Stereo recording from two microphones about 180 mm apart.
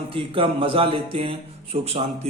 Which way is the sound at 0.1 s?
30° right (ahead or behind).